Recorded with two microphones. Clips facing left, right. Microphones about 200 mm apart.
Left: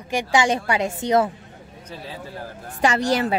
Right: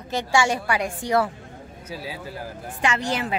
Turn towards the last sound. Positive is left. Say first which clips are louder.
# left 5 dB
turn(degrees=40)  # may be behind; listen again after turning